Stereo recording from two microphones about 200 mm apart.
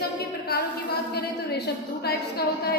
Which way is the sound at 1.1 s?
55° left (ahead or behind).